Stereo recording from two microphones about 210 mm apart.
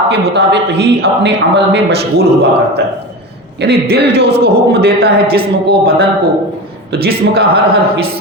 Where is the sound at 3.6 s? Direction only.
50° right (ahead or behind).